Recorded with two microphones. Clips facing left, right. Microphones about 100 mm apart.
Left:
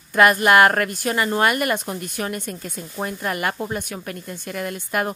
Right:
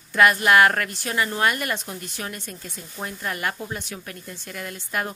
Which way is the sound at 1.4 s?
60° left (ahead or behind).